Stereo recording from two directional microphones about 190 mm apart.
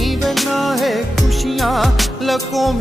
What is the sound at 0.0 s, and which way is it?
Music, centre (ahead or behind).